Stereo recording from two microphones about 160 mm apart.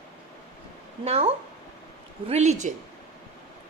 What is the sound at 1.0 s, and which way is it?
A woman's voice, 40° right (ahead or behind).